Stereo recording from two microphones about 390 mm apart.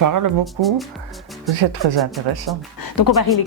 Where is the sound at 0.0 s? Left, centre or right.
Right.